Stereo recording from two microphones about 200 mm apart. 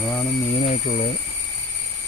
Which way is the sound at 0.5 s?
35° left (ahead or behind).